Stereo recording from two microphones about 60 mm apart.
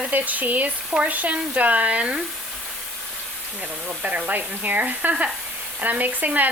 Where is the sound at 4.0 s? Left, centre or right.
Right.